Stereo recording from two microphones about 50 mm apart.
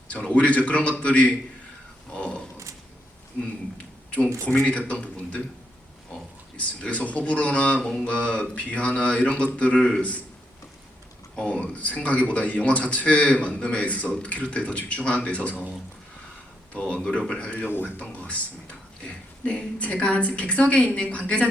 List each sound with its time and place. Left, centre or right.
0.1 s speech: left
2.1 s a sound: left
4.4 s speech: left
6.6 s speech: left
7.8 s speech: centre
11.3 s speech: left
16.7 s speech: left
17.7 s speech: left
17.9 s speech: left